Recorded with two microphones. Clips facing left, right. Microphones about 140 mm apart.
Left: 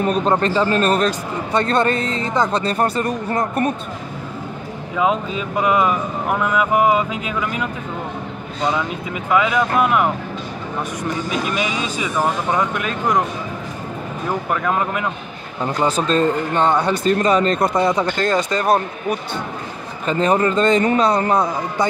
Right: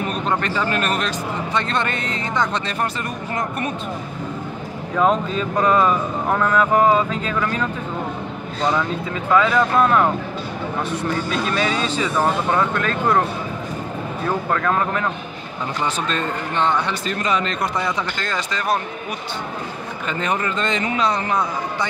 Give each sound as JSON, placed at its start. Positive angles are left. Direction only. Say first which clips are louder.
{"t": 0.0, "sound": "speech", "louder": "left 5 dB", "side_deg": 35}
{"t": 4.9, "sound": "speech", "louder": "right 1 dB", "side_deg": 5}
{"t": 9.3, "sound": "speech", "louder": "right 1 dB", "side_deg": 10}
{"t": 14.5, "sound": "speech", "louder": "left 1 dB", "side_deg": 15}
{"t": 15.8, "sound": "speech", "louder": "left 7 dB", "side_deg": 35}
{"t": 20.1, "sound": "speech", "louder": "left 7 dB", "side_deg": 35}